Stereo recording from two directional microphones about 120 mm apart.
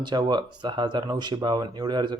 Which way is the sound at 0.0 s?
40° right (ahead or behind).